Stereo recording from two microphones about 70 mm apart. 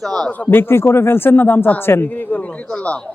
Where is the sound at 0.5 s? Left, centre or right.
Left; by 3.0 s centre.